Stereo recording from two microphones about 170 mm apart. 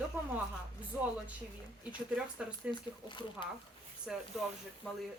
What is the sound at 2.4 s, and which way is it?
Speech, 5° right (ahead or behind).